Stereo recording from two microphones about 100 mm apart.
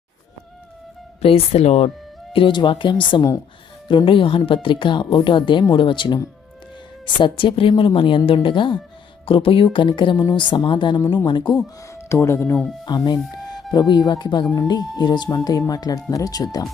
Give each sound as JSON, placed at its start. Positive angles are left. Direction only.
{"t": 1.2, "sound": "speech", "side_deg": 80}
{"t": 2.3, "sound": "speech", "side_deg": 55}
{"t": 7.2, "sound": "speech", "side_deg": 60}
{"t": 11.9, "sound": "speech", "side_deg": 25}
{"t": 12.8, "sound": "speech", "side_deg": 45}